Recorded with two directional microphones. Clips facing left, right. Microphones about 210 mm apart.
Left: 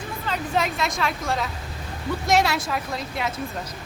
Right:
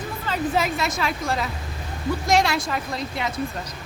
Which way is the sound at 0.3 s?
Centre (ahead or behind).